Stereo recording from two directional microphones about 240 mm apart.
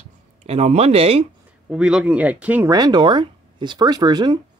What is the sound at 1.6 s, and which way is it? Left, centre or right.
Speech, centre.